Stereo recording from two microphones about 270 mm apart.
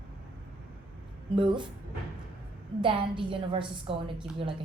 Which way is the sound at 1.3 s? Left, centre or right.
Centre.